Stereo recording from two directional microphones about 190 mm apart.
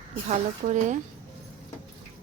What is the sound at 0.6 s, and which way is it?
Speech, 40° right (ahead or behind).